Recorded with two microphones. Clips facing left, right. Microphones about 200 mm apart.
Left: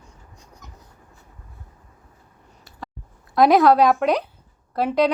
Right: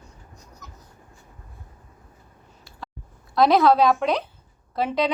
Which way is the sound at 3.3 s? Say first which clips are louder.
Left 2 dB; 15° left (ahead or behind).